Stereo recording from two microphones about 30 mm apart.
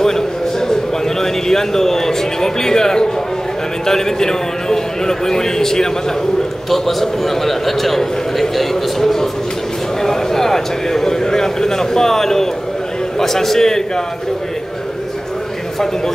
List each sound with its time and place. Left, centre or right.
0.0 s a sound: centre
3.8 s a man's voice: centre
6.7 s a man's voice: centre